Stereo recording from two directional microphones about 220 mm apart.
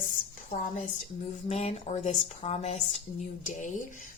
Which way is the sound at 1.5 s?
30° left (ahead or behind).